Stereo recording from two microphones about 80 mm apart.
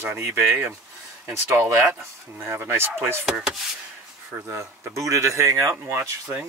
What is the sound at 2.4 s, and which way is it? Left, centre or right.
Speech, right.